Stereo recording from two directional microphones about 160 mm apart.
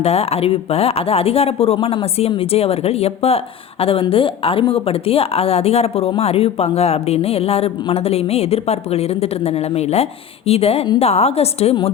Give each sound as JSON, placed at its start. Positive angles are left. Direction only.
{"t": 0.0, "sound": "speech", "side_deg": 40}